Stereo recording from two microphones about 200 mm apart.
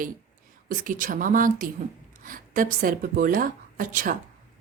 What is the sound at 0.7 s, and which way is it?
A woman's voice, 40° right (ahead or behind).